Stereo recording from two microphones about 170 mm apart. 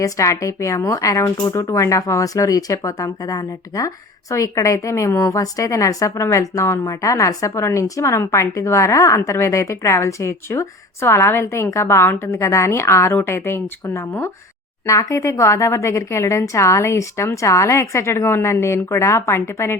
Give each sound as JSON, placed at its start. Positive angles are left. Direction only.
{"t": 0.0, "sound": "speech", "side_deg": 20}